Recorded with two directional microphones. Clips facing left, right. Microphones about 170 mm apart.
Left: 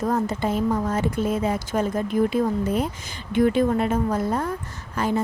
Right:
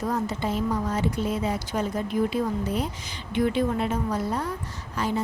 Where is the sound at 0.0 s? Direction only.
50° left (ahead or behind).